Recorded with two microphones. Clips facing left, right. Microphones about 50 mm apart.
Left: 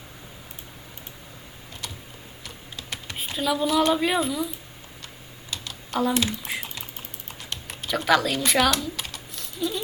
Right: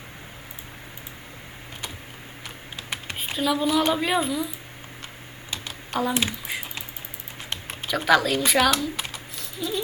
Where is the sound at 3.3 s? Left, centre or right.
Centre.